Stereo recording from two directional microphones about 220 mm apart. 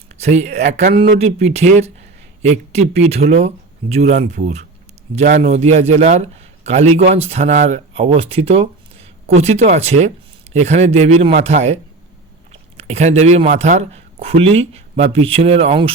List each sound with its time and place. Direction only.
0.2 s speech: 30° right (ahead or behind)
5.4 s speech: 30° right (ahead or behind)